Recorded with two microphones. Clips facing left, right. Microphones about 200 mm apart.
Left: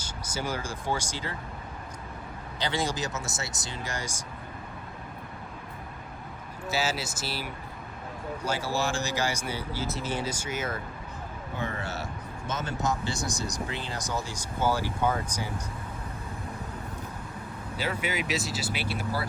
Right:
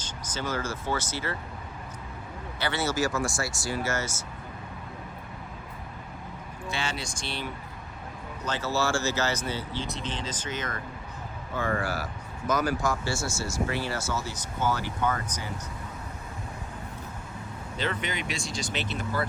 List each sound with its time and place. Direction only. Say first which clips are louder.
0.0 s speech: even; 10° left (ahead or behind)
2.6 s speech: right 2 dB; 15° left (ahead or behind)
6.7 s speech: left 4 dB; 5° left (ahead or behind)
11.6 s speech: right 5 dB; 25° left (ahead or behind)
17.7 s speech: left 1 dB; 10° left (ahead or behind)